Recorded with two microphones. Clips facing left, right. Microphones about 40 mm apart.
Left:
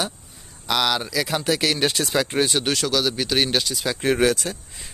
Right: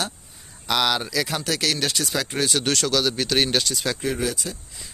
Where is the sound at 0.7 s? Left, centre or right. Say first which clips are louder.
Even; centre.